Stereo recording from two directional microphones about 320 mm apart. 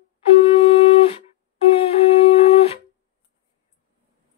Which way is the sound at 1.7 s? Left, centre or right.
Centre.